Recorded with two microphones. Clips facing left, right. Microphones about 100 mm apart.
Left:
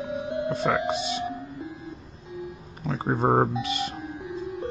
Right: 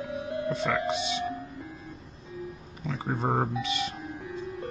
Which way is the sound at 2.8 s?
35° left (ahead or behind).